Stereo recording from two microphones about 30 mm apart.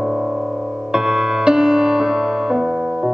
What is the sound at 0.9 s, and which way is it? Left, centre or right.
Music, right.